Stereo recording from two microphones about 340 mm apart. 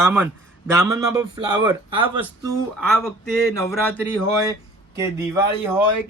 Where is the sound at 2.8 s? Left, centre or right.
Centre.